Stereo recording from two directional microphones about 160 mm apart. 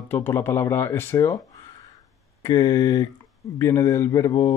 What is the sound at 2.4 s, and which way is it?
Speech, 25° left (ahead or behind).